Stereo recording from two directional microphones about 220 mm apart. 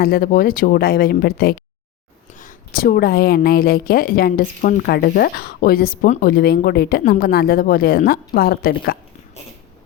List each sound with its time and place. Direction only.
0.0 s a woman's voice: 40° left (ahead or behind)